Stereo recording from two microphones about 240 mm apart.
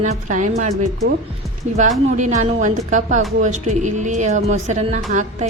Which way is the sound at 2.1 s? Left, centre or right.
Right.